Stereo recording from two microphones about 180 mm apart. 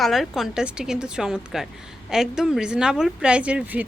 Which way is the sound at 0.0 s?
Centre (ahead or behind).